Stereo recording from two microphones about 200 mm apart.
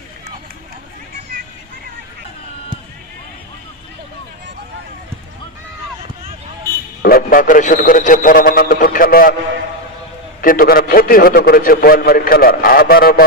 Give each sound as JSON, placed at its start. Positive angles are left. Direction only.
{"t": 7.0, "sound": "a man's voice", "side_deg": 45}
{"t": 10.4, "sound": "a man's voice", "side_deg": 45}